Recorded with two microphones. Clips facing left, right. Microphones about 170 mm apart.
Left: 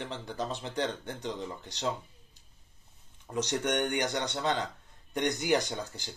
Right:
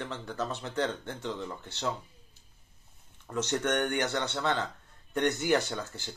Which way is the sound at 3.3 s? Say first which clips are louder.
Right 1 dB; 15° left (ahead or behind).